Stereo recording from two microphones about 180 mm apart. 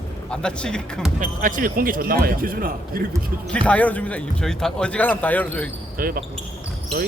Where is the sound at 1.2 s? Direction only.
50° right (ahead or behind).